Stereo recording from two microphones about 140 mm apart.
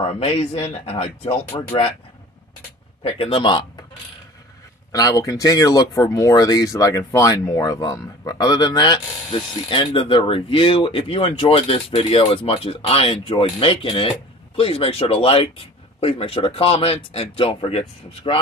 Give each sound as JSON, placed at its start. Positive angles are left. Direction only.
{"t": 0.0, "sound": "speech", "side_deg": 45}
{"t": 3.0, "sound": "speech", "side_deg": 40}
{"t": 4.9, "sound": "speech", "side_deg": 25}